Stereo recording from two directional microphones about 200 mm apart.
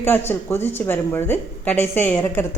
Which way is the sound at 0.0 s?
10° left (ahead or behind).